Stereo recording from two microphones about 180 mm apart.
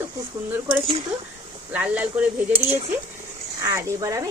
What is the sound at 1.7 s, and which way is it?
Speech, 10° right (ahead or behind).